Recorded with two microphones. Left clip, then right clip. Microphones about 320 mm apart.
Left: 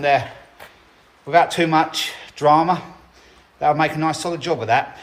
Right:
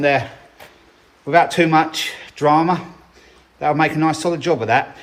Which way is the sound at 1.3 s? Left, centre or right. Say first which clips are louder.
Right 2 dB; centre.